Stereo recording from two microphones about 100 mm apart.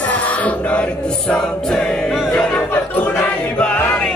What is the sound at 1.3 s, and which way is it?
Choir, 5° left (ahead or behind).